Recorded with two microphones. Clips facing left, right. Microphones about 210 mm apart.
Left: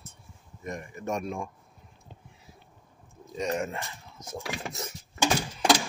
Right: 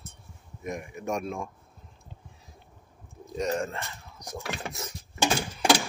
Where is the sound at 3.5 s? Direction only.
20° left (ahead or behind).